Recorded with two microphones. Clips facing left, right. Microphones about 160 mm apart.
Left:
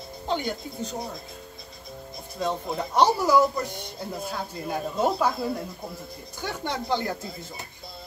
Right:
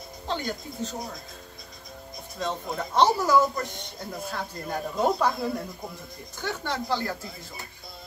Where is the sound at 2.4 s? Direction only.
10° left (ahead or behind).